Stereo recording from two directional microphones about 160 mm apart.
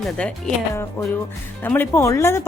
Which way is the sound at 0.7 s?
15° left (ahead or behind).